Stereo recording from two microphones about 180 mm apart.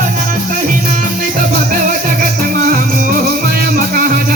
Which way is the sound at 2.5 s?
50° right (ahead or behind).